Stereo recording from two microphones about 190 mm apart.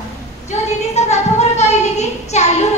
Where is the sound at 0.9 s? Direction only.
35° left (ahead or behind).